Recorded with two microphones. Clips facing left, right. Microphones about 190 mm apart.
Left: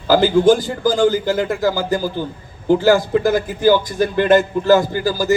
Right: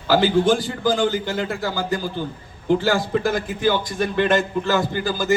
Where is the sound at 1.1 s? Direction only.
40° left (ahead or behind).